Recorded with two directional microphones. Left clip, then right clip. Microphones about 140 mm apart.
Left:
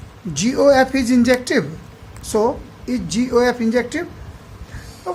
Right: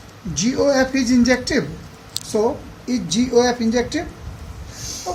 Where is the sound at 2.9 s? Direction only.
35° left (ahead or behind).